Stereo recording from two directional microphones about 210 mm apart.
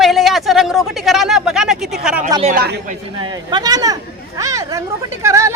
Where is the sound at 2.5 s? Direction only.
50° right (ahead or behind).